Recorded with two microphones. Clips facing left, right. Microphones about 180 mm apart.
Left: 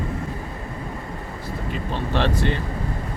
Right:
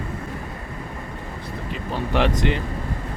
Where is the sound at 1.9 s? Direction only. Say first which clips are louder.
Right 2 dB; 15° right (ahead or behind).